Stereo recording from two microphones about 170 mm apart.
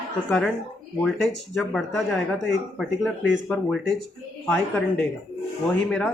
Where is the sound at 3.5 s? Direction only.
5° left (ahead or behind).